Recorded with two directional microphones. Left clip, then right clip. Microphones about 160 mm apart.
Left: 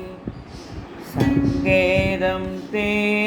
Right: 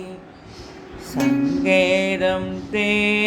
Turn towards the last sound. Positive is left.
turn(degrees=-40)  # may be behind; listen again after turning